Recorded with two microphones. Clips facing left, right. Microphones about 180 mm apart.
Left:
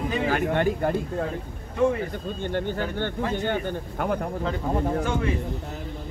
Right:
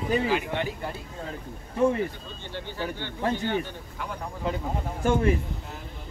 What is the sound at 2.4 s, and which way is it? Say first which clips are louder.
Speech: left 6 dB; 50° left (ahead or behind).